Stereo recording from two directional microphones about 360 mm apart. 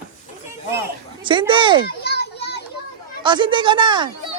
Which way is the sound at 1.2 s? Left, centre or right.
Centre.